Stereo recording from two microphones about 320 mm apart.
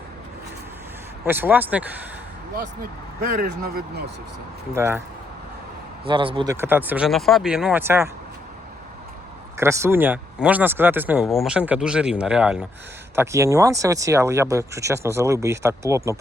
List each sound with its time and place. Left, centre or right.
1.2 s speech: centre
3.2 s speech: right
4.7 s speech: centre
6.1 s speech: centre
9.6 s speech: centre